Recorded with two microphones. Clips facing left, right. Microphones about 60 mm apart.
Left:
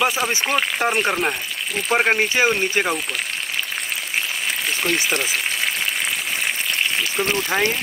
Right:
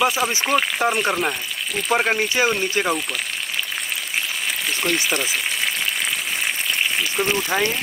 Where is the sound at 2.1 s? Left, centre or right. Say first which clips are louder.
Left 2 dB; left.